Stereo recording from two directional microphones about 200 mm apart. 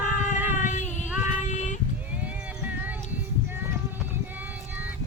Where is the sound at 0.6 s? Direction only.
40° left (ahead or behind).